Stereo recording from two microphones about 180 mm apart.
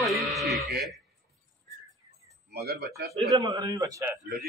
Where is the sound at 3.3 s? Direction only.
20° right (ahead or behind).